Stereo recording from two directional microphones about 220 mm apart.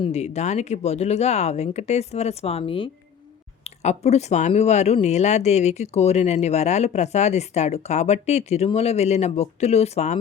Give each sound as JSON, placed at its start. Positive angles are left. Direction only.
{"t": 0.0, "sound": "speech", "side_deg": 30}